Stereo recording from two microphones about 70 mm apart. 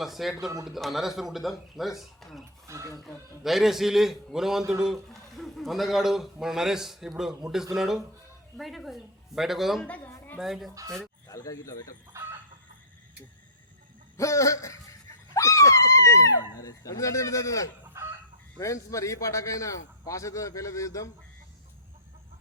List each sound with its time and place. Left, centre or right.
0.0 s a man's voice: centre
2.6 s speech: right
3.0 s a man's voice: centre
9.8 s a woman's voice: left
10.4 s a man's voice: centre
11.3 s speech: left
12.1 s chicken: right
14.2 s a man's voice: left